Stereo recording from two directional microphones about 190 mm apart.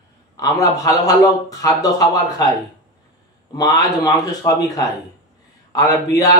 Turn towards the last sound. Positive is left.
turn(degrees=15)  # may be behind; listen again after turning